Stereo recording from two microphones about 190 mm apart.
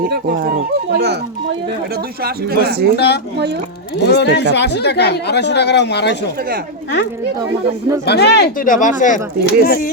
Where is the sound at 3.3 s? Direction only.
60° right (ahead or behind).